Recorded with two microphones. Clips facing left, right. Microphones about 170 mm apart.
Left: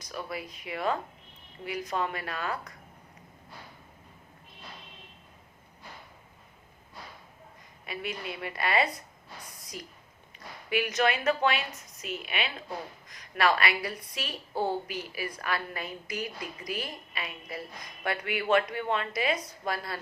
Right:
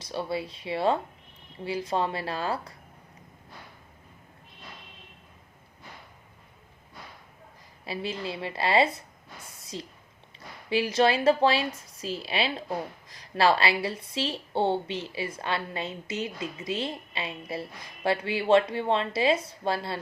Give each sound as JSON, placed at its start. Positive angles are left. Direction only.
{"t": 0.0, "sound": "a woman's voice", "side_deg": -30}
{"t": 7.9, "sound": "a woman's voice", "side_deg": -30}
{"t": 9.6, "sound": "a sound", "side_deg": -25}
{"t": 10.7, "sound": "a woman's voice", "side_deg": -30}